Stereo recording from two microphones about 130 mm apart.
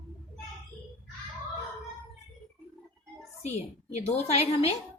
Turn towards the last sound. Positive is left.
turn(degrees=50)  # may be behind; listen again after turning